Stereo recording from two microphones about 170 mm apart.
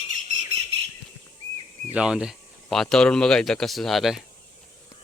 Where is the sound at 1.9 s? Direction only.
5° right (ahead or behind).